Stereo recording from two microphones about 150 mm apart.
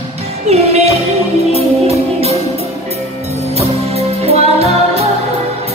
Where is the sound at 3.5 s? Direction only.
45° right (ahead or behind).